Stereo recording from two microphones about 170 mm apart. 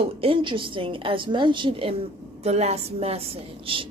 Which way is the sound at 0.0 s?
35° right (ahead or behind).